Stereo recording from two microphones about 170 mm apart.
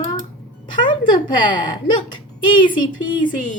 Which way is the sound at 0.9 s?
30° left (ahead or behind).